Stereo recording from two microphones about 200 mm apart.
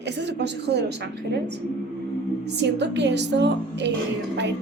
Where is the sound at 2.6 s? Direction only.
60° right (ahead or behind).